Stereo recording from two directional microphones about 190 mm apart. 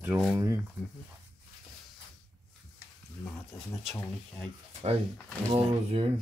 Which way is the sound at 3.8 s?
5° left (ahead or behind).